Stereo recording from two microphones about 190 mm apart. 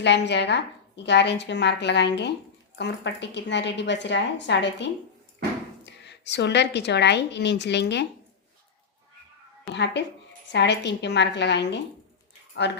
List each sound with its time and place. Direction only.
0.0 s a woman's voice: 65° left (ahead or behind)
9.7 s a woman's voice: 65° left (ahead or behind)